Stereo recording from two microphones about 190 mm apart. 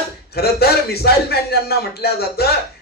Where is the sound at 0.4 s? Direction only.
55° left (ahead or behind).